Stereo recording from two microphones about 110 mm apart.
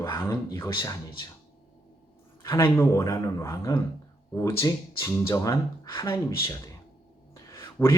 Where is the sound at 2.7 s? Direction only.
25° left (ahead or behind).